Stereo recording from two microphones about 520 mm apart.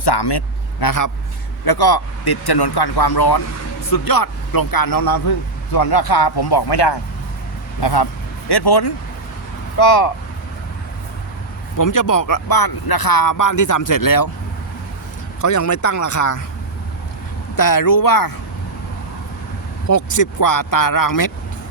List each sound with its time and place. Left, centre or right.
0.0 s a man's voice: left
11.8 s a man's voice: left
15.4 s a man's voice: left
17.6 s a man's voice: left
19.9 s a man's voice: left